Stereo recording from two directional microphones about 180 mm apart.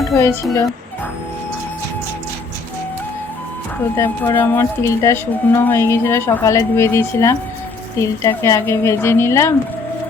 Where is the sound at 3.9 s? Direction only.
15° left (ahead or behind).